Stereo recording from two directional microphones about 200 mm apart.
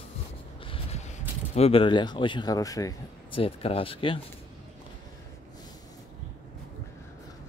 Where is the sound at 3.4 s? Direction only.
30° left (ahead or behind).